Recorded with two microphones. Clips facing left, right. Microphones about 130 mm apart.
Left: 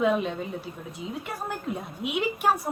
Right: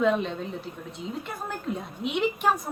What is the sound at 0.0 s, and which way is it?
A woman's voice, 5° left (ahead or behind).